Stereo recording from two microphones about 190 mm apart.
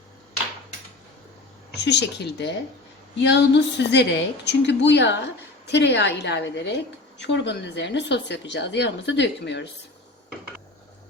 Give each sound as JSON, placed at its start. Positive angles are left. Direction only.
{"t": 1.7, "sound": "a woman's voice", "side_deg": 65}